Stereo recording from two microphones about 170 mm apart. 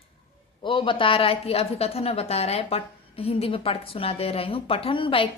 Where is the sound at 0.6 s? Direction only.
30° left (ahead or behind).